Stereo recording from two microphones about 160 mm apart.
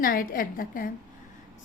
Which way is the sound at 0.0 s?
65° left (ahead or behind).